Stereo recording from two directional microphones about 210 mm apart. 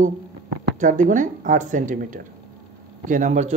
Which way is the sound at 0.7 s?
40° right (ahead or behind).